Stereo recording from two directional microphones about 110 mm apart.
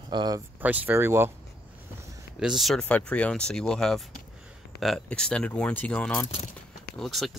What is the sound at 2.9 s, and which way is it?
Speech, 10° left (ahead or behind).